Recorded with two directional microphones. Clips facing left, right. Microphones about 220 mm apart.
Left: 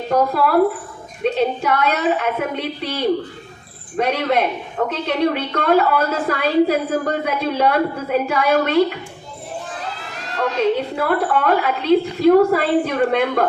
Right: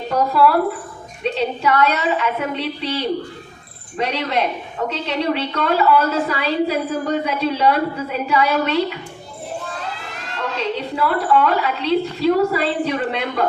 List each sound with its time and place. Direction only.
0.1 s a woman's voice: 50° left (ahead or behind)
10.3 s a woman's voice: 50° left (ahead or behind)